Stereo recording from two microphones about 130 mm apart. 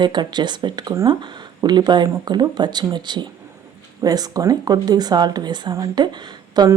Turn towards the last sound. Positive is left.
turn(degrees=-30)  # may be behind; listen again after turning